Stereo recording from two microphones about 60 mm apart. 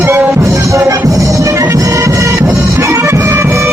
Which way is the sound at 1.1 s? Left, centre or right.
Right.